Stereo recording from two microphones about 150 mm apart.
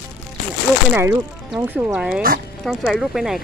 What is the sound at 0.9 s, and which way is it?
Speech, 15° right (ahead or behind).